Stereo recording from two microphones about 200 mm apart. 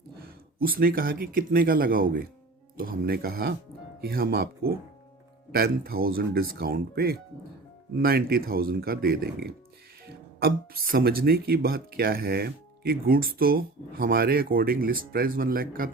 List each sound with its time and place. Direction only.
0.6 s speech: 45° right (ahead or behind)